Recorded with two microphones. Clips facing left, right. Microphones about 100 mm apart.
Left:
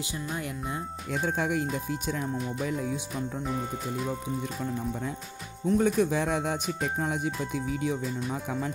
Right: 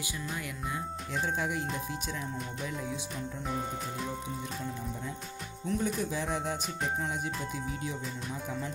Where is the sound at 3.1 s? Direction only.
Centre (ahead or behind).